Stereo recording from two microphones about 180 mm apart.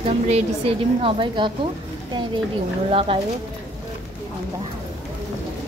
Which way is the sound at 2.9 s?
30° right (ahead or behind).